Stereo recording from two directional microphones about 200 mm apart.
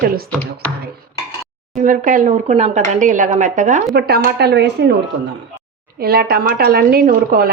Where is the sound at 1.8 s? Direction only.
40° right (ahead or behind).